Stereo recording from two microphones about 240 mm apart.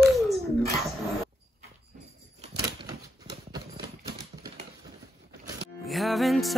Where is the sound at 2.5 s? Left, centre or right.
Centre.